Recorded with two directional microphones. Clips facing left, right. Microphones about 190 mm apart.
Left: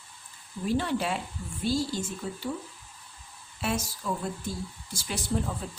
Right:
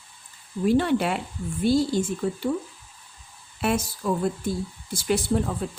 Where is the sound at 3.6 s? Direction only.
60° right (ahead or behind).